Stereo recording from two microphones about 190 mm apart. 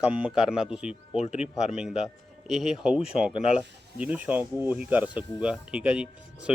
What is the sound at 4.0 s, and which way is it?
Speech, 5° right (ahead or behind).